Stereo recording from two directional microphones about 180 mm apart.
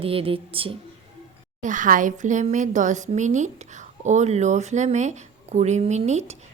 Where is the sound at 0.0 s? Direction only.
30° right (ahead or behind).